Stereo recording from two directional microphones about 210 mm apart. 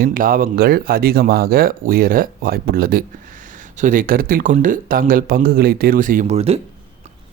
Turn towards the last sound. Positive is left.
turn(degrees=-30)  # may be behind; listen again after turning